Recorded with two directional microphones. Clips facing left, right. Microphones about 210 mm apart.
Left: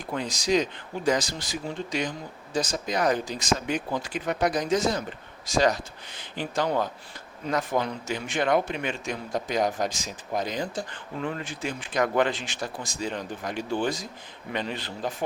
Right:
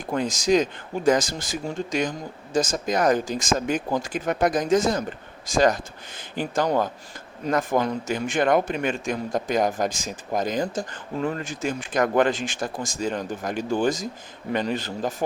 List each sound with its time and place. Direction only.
0.0 s speech: 50° right (ahead or behind)